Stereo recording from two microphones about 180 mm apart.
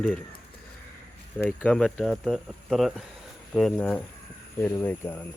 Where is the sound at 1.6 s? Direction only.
5° left (ahead or behind).